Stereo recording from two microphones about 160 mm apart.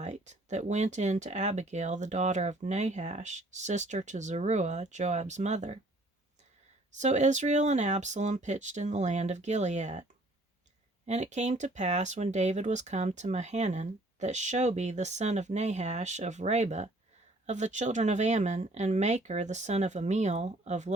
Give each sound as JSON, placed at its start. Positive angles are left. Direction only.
{"t": 0.0, "sound": "speech", "side_deg": -45}
{"t": 6.9, "sound": "speech", "side_deg": -50}
{"t": 11.0, "sound": "speech", "side_deg": -45}